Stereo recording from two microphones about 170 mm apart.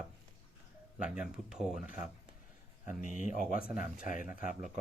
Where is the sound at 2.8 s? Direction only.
50° left (ahead or behind).